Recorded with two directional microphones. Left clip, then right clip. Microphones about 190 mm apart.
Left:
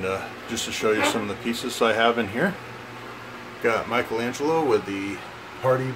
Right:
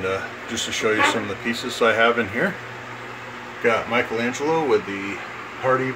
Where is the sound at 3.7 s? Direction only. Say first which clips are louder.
Right 3 dB; 5° left (ahead or behind).